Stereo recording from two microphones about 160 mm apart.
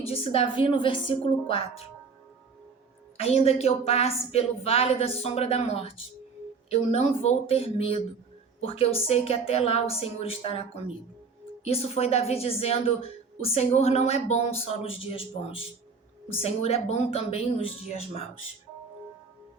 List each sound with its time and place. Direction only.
0.0 s a woman's voice: 35° left (ahead or behind)
3.2 s a woman's voice: 40° left (ahead or behind)